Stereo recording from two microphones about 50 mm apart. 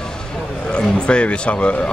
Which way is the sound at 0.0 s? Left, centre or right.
Centre.